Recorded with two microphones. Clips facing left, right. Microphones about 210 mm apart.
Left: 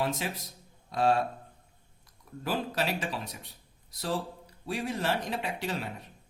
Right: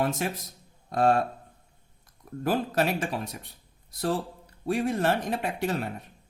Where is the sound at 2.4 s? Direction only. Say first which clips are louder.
Right 5 dB; 50° right (ahead or behind).